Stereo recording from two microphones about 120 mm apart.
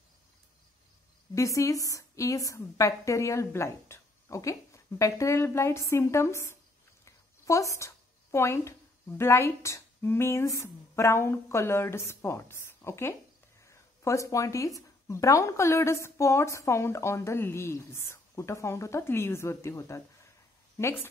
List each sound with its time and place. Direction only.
1.3 s speech: 25° left (ahead or behind)
7.1 s a sound: 25° left (ahead or behind)
9.2 s speech: 25° left (ahead or behind)